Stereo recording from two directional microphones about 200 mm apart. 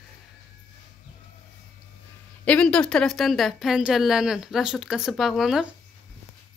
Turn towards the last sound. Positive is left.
turn(degrees=0)  # may be behind; listen again after turning